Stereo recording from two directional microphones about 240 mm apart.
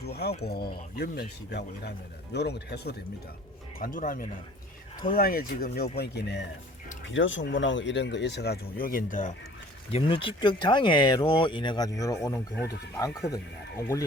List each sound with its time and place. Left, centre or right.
0.0 s speech: left
9.9 s speech: left